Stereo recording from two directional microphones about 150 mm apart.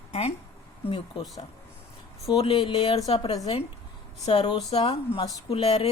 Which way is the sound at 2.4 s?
35° left (ahead or behind).